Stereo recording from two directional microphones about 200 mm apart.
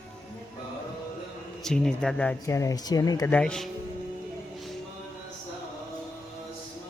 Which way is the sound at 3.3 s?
5° left (ahead or behind).